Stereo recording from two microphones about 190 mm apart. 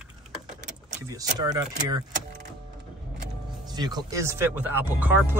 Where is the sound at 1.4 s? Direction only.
20° right (ahead or behind).